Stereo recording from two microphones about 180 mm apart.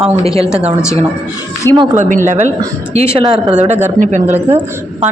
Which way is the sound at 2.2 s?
40° right (ahead or behind).